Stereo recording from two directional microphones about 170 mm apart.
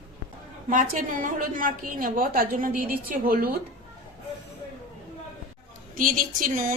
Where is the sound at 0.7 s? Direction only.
50° right (ahead or behind).